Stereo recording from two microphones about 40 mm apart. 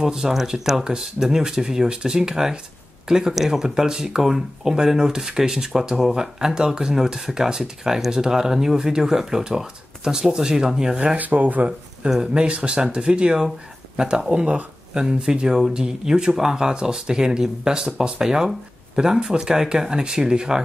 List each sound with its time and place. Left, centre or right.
0.0 s speech: centre
11.1 s speech: right
12.1 s speech: right